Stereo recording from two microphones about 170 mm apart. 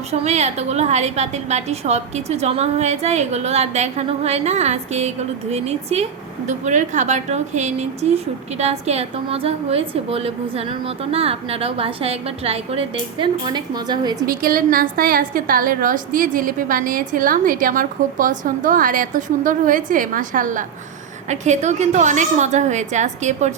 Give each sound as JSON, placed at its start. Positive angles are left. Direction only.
{"t": 0.1, "sound": "a woman's voice", "side_deg": -40}
{"t": 14.3, "sound": "a woman's voice", "side_deg": -55}